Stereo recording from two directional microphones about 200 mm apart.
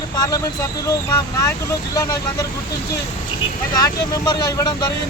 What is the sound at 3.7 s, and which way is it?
Speech, 20° left (ahead or behind).